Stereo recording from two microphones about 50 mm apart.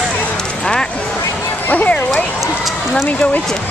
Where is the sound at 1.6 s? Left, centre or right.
Left.